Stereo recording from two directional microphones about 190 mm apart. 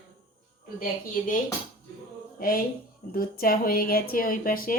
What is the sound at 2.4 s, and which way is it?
A woman's voice, 50° left (ahead or behind).